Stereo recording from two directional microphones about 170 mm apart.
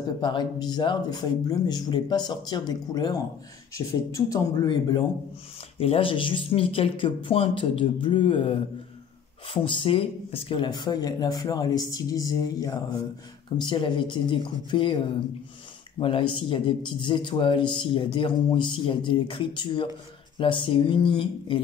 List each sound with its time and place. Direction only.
0.2 s speech: 25° left (ahead or behind)